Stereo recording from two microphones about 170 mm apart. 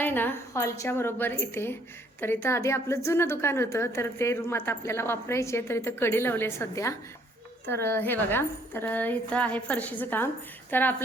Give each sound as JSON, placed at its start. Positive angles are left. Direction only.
{"t": 0.0, "sound": "a woman's voice", "side_deg": 10}